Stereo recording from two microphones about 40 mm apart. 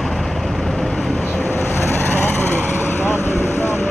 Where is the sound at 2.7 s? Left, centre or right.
Left.